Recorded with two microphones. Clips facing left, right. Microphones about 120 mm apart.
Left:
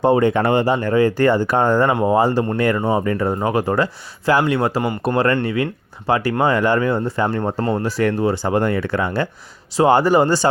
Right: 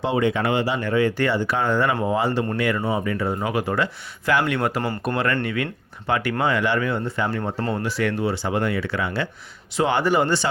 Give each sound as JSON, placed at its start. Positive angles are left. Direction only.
{"t": 0.0, "sound": "speech", "side_deg": 45}
{"t": 1.9, "sound": "speech", "side_deg": 25}
{"t": 2.1, "sound": "speech", "side_deg": 40}